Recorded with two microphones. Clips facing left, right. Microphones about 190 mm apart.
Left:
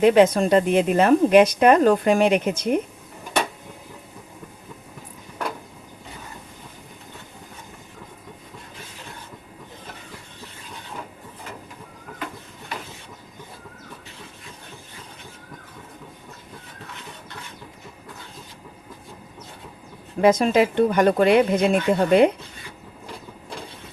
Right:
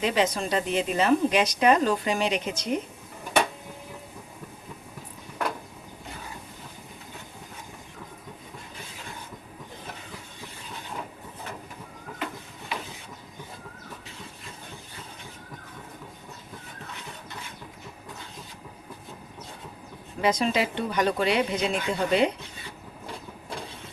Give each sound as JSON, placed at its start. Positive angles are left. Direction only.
{"t": 0.0, "sound": "a woman's voice", "side_deg": 55}
{"t": 20.2, "sound": "speech", "side_deg": 50}